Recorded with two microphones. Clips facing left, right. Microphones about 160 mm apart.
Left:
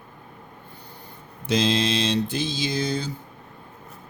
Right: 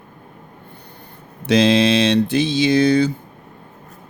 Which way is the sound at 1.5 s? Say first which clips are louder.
Right 8 dB; 70° right (ahead or behind).